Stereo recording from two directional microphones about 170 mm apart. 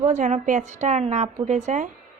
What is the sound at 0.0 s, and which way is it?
Speech, 45° right (ahead or behind).